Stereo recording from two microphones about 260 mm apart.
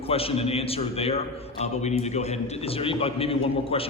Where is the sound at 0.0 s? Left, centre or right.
Left.